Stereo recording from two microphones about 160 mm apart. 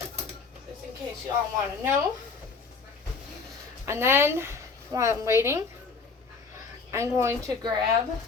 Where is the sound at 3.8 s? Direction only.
15° right (ahead or behind).